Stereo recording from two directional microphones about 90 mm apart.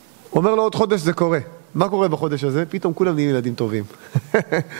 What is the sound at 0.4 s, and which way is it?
A man's voice, 20° right (ahead or behind).